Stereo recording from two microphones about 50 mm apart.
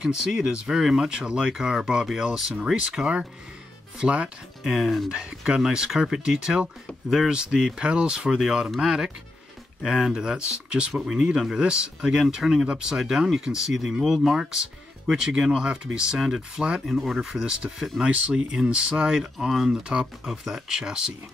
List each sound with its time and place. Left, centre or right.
0.0 s speech: centre
4.6 s speech: centre
5.1 s speech: centre
14.0 s speech: centre
14.3 s speech: centre
16.8 s speech: centre